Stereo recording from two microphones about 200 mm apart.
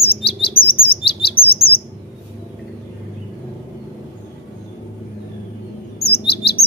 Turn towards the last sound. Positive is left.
turn(degrees=55)  # may be behind; listen again after turning